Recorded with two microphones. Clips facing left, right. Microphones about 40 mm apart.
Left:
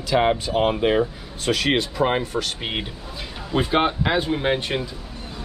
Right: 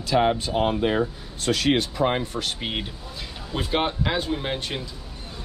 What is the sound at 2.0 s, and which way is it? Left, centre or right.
Speech, left.